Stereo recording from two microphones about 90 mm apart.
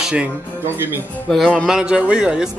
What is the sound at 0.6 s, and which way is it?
Speech, 25° right (ahead or behind).